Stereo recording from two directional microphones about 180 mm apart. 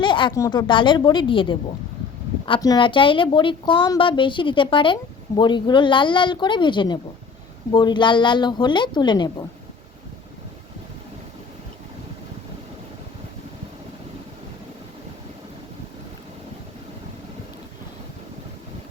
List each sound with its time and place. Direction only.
0.0 s a woman's voice: 25° left (ahead or behind)